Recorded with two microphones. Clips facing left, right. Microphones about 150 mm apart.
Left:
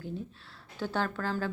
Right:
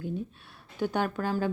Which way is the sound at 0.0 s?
15° right (ahead or behind).